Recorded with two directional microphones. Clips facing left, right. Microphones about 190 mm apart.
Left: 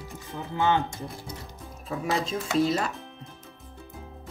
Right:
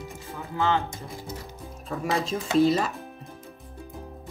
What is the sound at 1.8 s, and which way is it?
Speech, centre (ahead or behind).